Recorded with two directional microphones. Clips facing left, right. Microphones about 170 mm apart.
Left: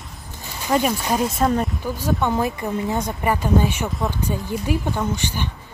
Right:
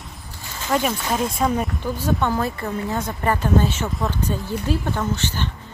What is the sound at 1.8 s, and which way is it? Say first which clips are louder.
A woman's voice: even; 10° left (ahead or behind).